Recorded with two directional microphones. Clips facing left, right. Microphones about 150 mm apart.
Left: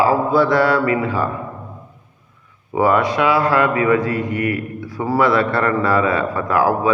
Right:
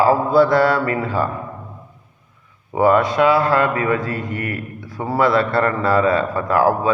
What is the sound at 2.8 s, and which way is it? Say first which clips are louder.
A man's voice: right 2 dB; 30° right (ahead or behind).